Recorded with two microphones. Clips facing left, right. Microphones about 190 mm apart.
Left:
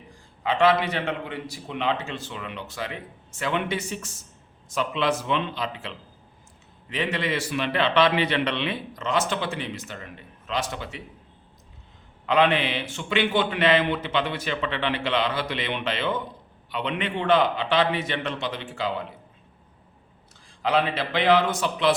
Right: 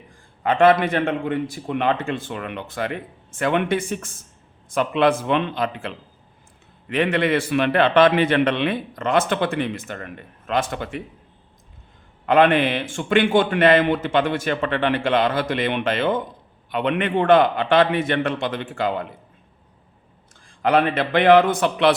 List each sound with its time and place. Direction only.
0.4 s a man's voice: 50° right (ahead or behind)
12.2 s a man's voice: 50° right (ahead or behind)
20.6 s a man's voice: 55° right (ahead or behind)